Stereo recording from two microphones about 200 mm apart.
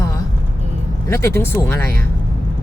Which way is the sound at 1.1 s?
15° left (ahead or behind).